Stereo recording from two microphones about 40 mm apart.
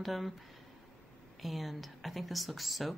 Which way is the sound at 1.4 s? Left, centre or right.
Centre.